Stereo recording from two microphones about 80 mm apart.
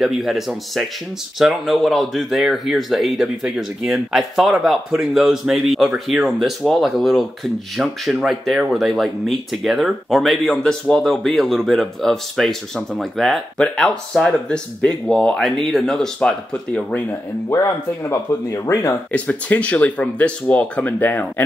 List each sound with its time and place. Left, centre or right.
0.0 s speech: centre
18.3 s speech: left
19.1 s speech: centre